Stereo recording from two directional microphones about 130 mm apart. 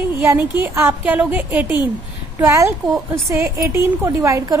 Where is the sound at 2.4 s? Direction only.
25° right (ahead or behind).